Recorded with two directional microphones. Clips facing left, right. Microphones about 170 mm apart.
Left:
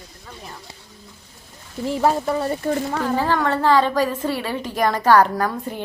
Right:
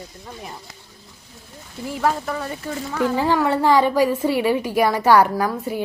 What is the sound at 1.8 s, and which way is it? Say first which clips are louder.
Speech: left 3 dB; 30° left (ahead or behind).